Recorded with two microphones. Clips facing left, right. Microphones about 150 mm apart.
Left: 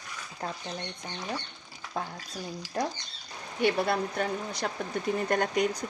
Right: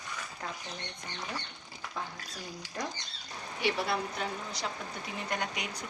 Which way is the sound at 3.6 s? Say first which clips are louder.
Left 5 dB; 50° left (ahead or behind).